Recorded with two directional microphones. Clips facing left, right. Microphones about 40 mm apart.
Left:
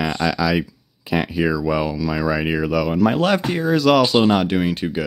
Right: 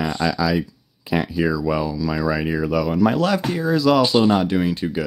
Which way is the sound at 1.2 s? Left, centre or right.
Left.